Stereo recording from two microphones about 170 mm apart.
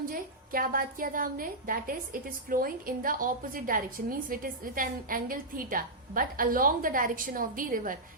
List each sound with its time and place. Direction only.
0.0 s a woman's voice: 55° right (ahead or behind)